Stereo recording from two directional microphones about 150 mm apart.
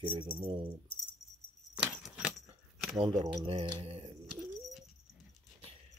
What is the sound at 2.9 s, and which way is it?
Speech, 40° right (ahead or behind).